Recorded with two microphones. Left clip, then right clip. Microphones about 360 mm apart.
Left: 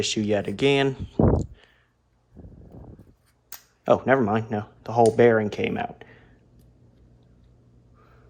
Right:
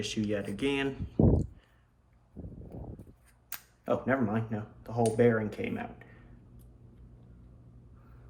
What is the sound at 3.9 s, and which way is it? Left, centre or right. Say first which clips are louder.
Speech: left 10 dB; centre.